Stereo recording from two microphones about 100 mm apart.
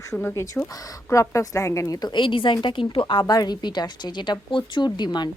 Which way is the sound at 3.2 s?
40° left (ahead or behind).